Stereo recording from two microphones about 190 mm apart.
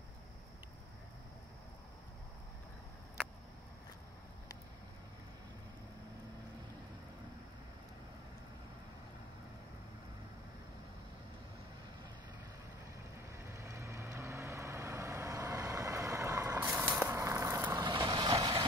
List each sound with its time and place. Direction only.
13.4 s vehicle: 15° right (ahead or behind)
17.8 s vehicle: 25° right (ahead or behind)